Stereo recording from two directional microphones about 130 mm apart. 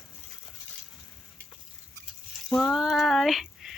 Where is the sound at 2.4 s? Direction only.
5° left (ahead or behind).